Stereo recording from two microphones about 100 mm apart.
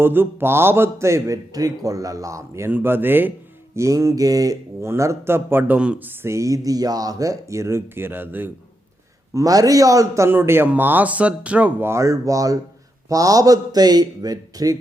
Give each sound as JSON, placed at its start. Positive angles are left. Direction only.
{"t": 0.0, "sound": "speech", "side_deg": -20}
{"t": 2.6, "sound": "a man's voice", "side_deg": -20}
{"t": 9.3, "sound": "a man's voice", "side_deg": -35}
{"t": 10.2, "sound": "speech", "side_deg": -25}
{"t": 11.9, "sound": "a man's voice", "side_deg": -30}